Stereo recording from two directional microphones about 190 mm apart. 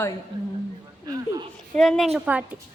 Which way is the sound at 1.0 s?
20° right (ahead or behind).